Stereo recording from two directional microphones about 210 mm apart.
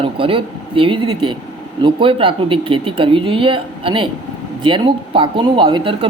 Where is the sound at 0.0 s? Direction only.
25° right (ahead or behind).